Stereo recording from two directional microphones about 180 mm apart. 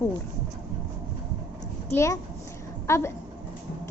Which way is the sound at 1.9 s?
15° left (ahead or behind).